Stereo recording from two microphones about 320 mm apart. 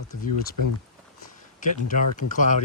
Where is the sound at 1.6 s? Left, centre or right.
Left.